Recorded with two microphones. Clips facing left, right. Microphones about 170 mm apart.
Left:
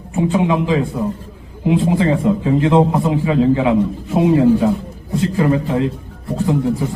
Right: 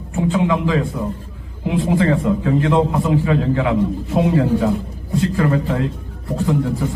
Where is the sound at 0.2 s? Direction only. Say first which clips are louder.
Left 2 dB; 20° left (ahead or behind).